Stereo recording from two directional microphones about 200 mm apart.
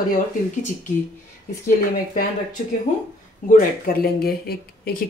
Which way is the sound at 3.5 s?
45° left (ahead or behind).